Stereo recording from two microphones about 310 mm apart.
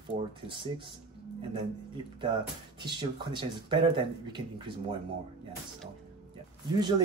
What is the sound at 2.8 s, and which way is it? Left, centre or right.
Speech, centre.